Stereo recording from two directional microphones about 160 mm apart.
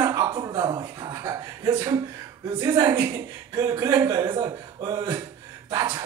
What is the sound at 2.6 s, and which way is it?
Speech, 20° right (ahead or behind).